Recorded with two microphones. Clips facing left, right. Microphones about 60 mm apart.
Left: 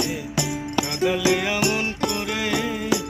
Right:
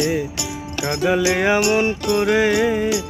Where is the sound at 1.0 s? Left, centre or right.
Right.